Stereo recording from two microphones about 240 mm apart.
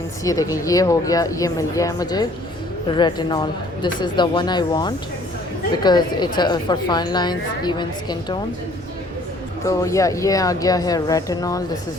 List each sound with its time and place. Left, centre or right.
0.3 s a woman's voice: centre
9.6 s a woman's voice: centre